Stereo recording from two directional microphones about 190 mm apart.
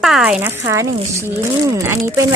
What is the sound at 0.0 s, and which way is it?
Speech, 5° right (ahead or behind).